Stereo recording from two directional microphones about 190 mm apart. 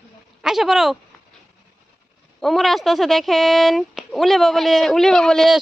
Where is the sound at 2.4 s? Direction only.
Centre (ahead or behind).